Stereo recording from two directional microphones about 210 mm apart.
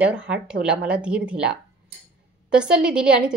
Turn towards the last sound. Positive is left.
turn(degrees=-5)  # may be behind; listen again after turning